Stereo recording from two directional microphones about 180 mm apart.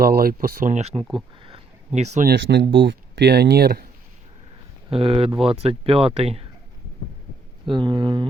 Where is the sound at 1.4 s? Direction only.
35° right (ahead or behind).